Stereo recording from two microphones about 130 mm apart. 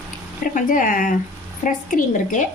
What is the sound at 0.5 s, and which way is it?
A woman's voice, 90° left.